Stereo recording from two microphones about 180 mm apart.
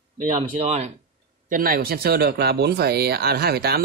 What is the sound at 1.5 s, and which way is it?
Speech, 50° right (ahead or behind).